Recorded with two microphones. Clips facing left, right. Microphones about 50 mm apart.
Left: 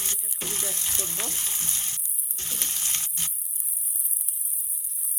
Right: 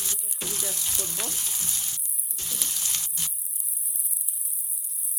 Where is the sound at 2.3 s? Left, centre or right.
Left.